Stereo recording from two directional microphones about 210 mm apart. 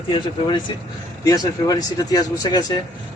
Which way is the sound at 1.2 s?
15° left (ahead or behind).